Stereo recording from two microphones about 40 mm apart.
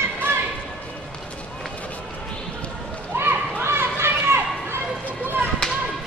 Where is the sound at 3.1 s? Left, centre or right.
Right.